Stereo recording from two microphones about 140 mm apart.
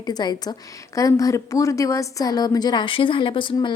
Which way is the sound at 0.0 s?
30° left (ahead or behind).